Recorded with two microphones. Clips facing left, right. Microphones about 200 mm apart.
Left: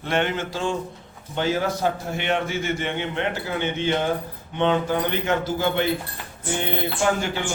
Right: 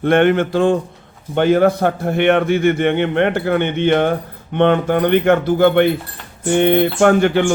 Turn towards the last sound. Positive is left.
turn(degrees=-60)  # may be behind; listen again after turning